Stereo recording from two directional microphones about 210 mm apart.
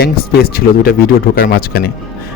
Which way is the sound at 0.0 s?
45° left (ahead or behind).